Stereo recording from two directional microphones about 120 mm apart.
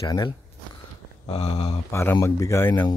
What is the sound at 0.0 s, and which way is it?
Speech, 30° left (ahead or behind).